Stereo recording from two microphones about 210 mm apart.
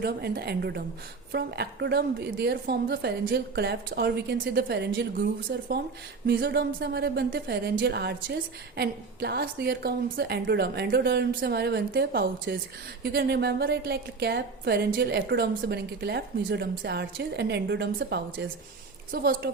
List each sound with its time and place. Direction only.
0.0 s a woman's voice: 50° right (ahead or behind)